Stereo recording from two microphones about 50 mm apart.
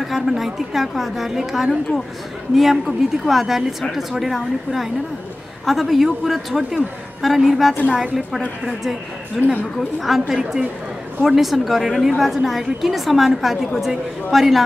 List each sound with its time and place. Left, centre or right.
0.0 s a woman's voice: centre
9.4 s a woman's voice: centre
9.8 s a woman's voice: centre